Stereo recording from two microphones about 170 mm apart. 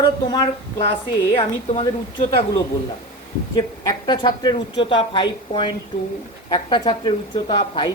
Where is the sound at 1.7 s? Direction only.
30° left (ahead or behind).